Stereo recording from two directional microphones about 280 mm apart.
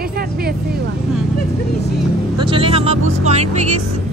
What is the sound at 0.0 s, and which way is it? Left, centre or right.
Vehicle, right.